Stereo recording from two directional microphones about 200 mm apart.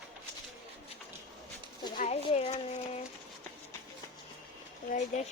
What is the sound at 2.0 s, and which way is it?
Speech, 35° left (ahead or behind).